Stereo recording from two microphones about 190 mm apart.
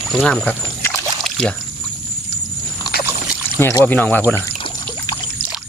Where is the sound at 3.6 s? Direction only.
15° left (ahead or behind).